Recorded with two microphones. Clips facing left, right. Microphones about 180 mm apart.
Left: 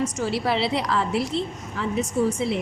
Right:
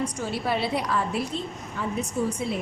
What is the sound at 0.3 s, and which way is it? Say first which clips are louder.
A woman's voice: left 2 dB; 80° left.